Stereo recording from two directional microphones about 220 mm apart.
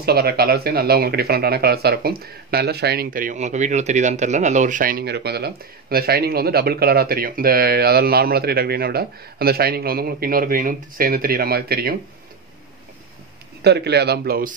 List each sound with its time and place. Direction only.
0.0 s speech: 45° right (ahead or behind)
13.6 s speech: 50° right (ahead or behind)